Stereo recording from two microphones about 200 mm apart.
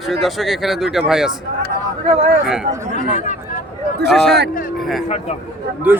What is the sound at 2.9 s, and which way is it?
Speech, 40° right (ahead or behind).